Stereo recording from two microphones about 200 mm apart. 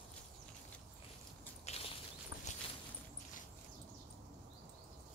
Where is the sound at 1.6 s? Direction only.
30° left (ahead or behind).